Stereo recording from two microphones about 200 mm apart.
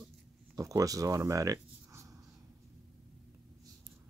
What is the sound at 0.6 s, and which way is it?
Speech, 15° right (ahead or behind).